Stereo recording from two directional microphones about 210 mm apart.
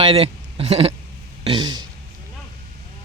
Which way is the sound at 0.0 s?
30° right (ahead or behind).